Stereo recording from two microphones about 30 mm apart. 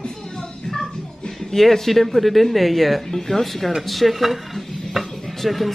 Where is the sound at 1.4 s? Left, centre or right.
Centre.